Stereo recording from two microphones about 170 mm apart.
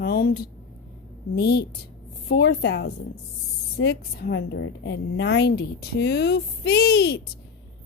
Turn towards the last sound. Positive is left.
turn(degrees=75)  # may be behind; listen again after turning